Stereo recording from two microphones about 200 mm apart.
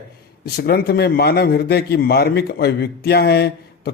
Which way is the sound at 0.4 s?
50° left (ahead or behind).